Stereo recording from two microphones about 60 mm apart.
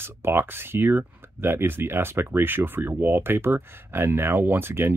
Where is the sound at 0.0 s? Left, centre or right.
Right.